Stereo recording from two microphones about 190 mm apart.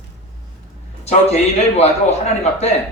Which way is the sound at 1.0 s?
35° left (ahead or behind).